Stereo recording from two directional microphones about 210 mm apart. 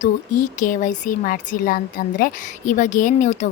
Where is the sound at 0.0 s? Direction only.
40° left (ahead or behind).